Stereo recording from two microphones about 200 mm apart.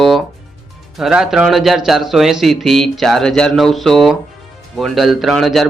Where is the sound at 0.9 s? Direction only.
Centre (ahead or behind).